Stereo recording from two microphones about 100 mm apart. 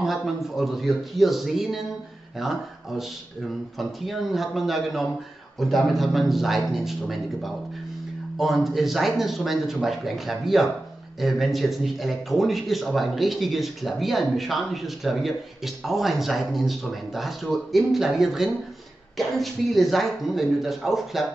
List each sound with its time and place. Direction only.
0.0 s speech: centre (ahead or behind)
3.7 s speech: centre (ahead or behind)